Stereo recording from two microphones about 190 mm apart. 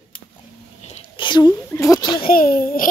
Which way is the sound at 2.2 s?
50° left (ahead or behind).